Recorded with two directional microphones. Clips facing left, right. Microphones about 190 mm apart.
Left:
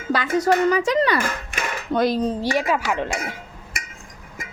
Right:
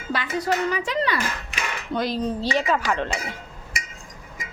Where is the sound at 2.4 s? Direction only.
10° left (ahead or behind).